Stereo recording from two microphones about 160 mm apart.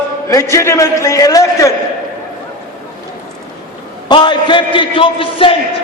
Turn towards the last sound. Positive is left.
turn(degrees=35)  # may be behind; listen again after turning